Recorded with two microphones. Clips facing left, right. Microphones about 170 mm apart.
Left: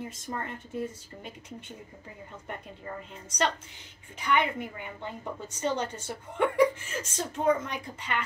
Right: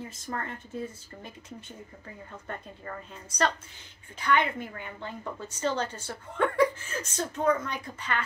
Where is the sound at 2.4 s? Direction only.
15° left (ahead or behind).